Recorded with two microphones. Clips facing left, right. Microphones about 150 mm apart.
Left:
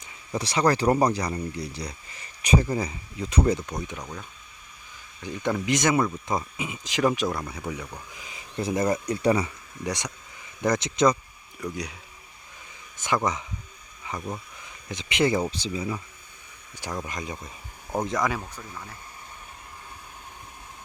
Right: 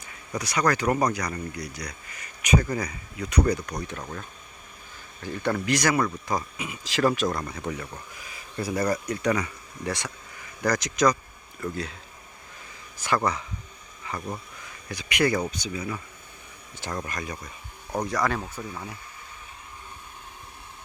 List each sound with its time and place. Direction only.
0.0 s speech: 25° left (ahead or behind)
5.2 s speech: 15° left (ahead or behind)
7.3 s speech: 5° left (ahead or behind)
8.1 s speech: 20° left (ahead or behind)
11.6 s speech: 15° left (ahead or behind)
13.0 s speech: 20° left (ahead or behind)
14.8 s speech: 25° left (ahead or behind)
16.7 s speech: 10° left (ahead or behind)
17.1 s speech: 20° left (ahead or behind)